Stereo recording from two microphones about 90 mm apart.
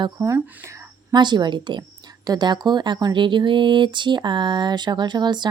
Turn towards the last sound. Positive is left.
turn(degrees=-55)  # may be behind; listen again after turning